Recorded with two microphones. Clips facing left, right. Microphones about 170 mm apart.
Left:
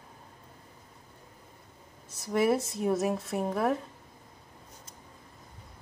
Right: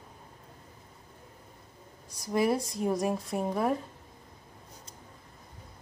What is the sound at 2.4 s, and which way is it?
A woman's voice, 5° left (ahead or behind).